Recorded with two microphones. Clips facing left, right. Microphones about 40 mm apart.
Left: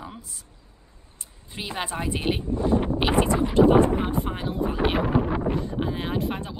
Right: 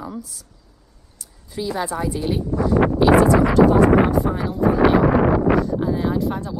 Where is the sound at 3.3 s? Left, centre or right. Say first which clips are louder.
Right 4 dB; right.